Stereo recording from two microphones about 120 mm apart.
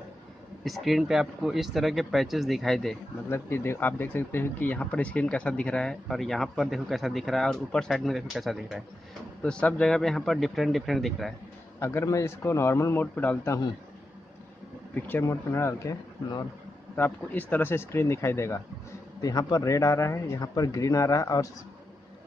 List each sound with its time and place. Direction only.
0.7 s speech: centre (ahead or behind)
3.3 s speech: 20° left (ahead or behind); by 8.8 s centre (ahead or behind)
9.4 s speech: 10° left (ahead or behind)
11.8 s speech: 20° left (ahead or behind)
15.0 s speech: 15° left (ahead or behind)
16.9 s speech: 15° left (ahead or behind)